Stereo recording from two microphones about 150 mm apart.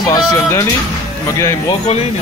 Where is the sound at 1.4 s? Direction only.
20° left (ahead or behind).